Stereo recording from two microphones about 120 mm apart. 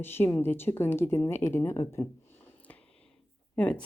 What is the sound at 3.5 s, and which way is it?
Speech, 10° left (ahead or behind).